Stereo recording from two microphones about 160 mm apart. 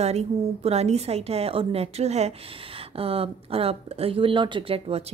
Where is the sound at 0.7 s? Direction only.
40° right (ahead or behind).